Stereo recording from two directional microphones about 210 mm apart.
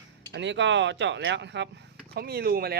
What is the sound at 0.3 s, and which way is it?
Speech, 60° right (ahead or behind).